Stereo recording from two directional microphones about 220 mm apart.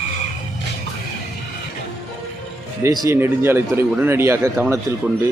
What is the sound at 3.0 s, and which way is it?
Speech, 10° right (ahead or behind).